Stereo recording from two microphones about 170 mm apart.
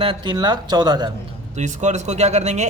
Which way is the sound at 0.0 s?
30° right (ahead or behind).